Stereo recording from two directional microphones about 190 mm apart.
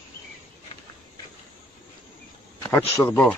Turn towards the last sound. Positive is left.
turn(degrees=5)  # may be behind; listen again after turning